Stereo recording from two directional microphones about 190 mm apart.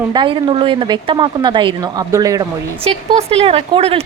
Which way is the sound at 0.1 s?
25° right (ahead or behind).